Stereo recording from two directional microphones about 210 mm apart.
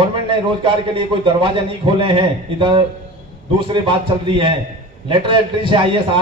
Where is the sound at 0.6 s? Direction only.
25° right (ahead or behind).